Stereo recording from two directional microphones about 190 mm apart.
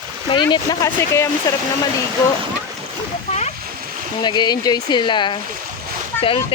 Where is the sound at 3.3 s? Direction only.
35° left (ahead or behind).